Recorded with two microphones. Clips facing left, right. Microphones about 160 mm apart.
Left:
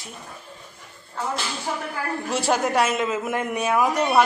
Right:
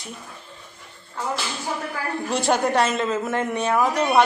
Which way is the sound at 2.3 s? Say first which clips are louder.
Right 1 dB; 5° left (ahead or behind).